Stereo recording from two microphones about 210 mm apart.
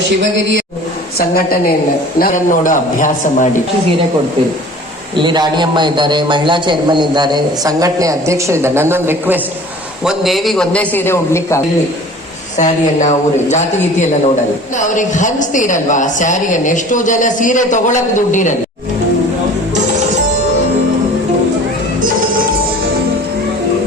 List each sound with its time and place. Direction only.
0.2 s speech: 60° right (ahead or behind)
1.2 s a woman's voice: 45° left (ahead or behind)
5.1 s a man's voice: 20° right (ahead or behind); by 11.6 s 10° left (ahead or behind)
12.5 s a woman's voice: 35° left (ahead or behind)
14.8 s a woman's voice: 35° left (ahead or behind)